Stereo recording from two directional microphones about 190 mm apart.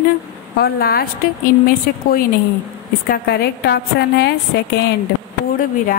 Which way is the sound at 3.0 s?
55° left (ahead or behind).